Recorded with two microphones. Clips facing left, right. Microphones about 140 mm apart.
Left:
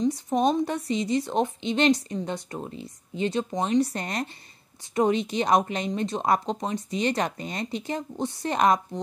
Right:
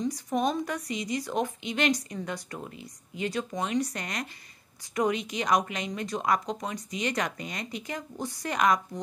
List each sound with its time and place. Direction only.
0.0 s a woman's voice: 25° left (ahead or behind)